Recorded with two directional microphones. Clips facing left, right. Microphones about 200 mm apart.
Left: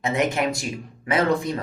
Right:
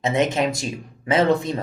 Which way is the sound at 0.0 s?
20° right (ahead or behind).